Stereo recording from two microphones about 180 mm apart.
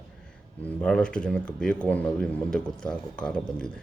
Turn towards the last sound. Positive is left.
turn(degrees=5)  # may be behind; listen again after turning